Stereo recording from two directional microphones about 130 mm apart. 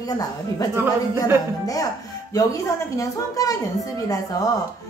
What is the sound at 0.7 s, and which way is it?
Speech, 15° right (ahead or behind).